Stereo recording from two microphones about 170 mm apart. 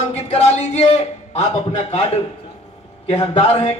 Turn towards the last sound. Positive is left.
turn(degrees=35)  # may be behind; listen again after turning